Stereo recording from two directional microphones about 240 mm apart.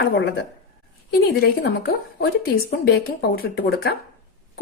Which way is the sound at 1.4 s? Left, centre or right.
Left.